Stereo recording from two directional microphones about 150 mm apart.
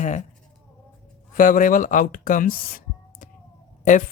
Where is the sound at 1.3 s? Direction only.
65° left (ahead or behind).